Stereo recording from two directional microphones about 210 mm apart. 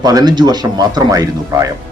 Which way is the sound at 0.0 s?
20° right (ahead or behind).